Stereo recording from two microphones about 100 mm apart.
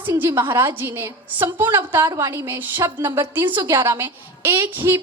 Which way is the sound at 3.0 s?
45° right (ahead or behind).